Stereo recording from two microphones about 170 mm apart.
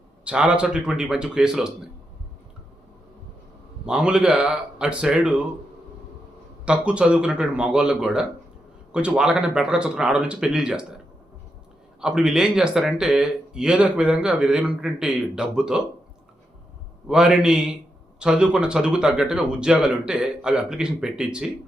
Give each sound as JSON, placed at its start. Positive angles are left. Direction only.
{"t": 0.3, "sound": "speech", "side_deg": -5}
{"t": 3.8, "sound": "speech", "side_deg": -5}
{"t": 6.7, "sound": "speech", "side_deg": -5}
{"t": 11.9, "sound": "speech", "side_deg": -5}
{"t": 17.1, "sound": "speech", "side_deg": -5}